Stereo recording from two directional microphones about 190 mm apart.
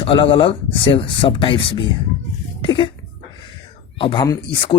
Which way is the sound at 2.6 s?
25° left (ahead or behind).